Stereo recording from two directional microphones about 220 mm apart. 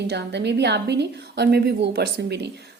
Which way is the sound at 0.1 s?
50° right (ahead or behind).